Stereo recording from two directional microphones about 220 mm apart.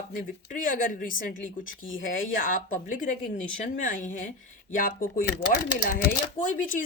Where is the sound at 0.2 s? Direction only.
35° left (ahead or behind).